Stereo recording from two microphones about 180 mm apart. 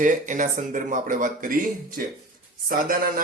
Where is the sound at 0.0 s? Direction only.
45° right (ahead or behind).